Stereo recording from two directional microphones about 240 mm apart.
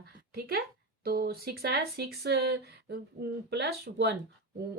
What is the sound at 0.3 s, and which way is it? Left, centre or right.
Speech, right.